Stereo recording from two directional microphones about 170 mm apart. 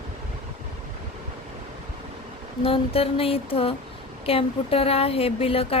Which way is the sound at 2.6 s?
35° left (ahead or behind).